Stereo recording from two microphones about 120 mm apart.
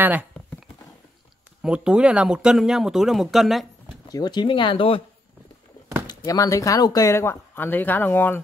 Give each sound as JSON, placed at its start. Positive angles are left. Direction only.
{"t": 1.6, "sound": "speech", "side_deg": -10}
{"t": 4.1, "sound": "speech", "side_deg": 35}
{"t": 6.0, "sound": "speech", "side_deg": 30}